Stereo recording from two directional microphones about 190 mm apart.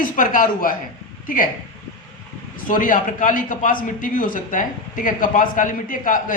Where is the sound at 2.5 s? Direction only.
45° left (ahead or behind).